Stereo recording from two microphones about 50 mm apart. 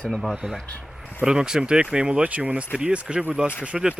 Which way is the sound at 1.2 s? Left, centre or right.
Centre.